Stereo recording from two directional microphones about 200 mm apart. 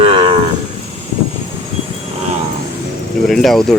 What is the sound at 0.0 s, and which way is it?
Cattle, 30° right (ahead or behind).